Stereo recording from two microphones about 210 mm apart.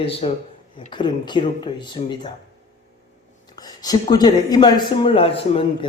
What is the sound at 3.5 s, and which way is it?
Speech, 20° left (ahead or behind).